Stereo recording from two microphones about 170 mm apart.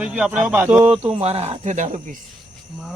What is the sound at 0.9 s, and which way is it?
Speech, 35° right (ahead or behind).